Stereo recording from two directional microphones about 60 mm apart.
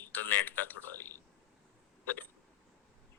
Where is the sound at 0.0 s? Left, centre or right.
Left.